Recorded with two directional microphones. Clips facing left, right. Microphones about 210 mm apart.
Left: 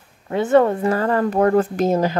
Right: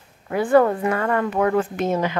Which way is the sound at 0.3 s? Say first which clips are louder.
Left 1 dB; 25° left (ahead or behind).